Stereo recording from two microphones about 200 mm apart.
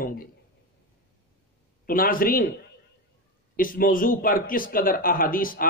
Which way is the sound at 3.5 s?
45° left (ahead or behind).